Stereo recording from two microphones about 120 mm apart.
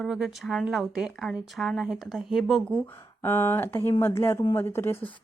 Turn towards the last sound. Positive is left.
turn(degrees=20)  # may be behind; listen again after turning